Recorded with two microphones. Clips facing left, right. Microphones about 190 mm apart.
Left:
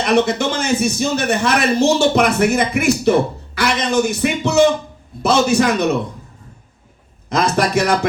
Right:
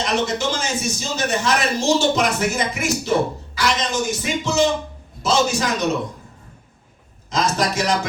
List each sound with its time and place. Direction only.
0.0 s speech: 60° left (ahead or behind)
7.3 s speech: 60° left (ahead or behind)